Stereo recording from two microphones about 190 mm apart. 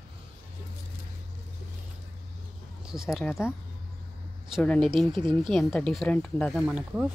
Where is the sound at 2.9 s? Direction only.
Centre (ahead or behind).